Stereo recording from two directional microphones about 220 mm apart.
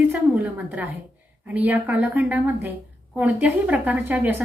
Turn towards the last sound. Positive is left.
turn(degrees=-5)  # may be behind; listen again after turning